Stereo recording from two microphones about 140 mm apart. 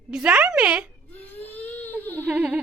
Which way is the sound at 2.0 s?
10° left (ahead or behind).